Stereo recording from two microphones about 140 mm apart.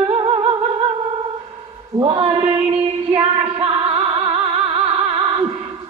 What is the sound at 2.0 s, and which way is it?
Female singing, 40° right (ahead or behind).